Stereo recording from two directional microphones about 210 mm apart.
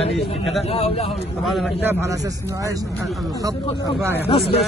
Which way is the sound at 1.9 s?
15° right (ahead or behind).